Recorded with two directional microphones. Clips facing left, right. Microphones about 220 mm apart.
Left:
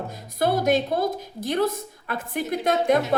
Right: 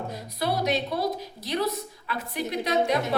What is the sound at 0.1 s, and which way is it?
A woman's voice, 50° left (ahead or behind).